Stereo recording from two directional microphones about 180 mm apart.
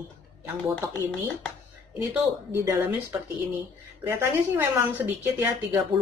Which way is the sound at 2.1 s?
15° right (ahead or behind).